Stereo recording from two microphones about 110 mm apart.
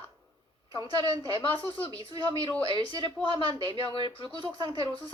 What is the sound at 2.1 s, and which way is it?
A man's voice, 35° right (ahead or behind).